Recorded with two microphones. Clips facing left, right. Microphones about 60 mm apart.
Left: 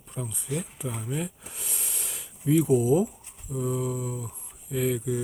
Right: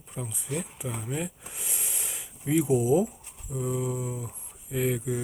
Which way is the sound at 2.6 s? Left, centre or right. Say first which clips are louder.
Even; centre.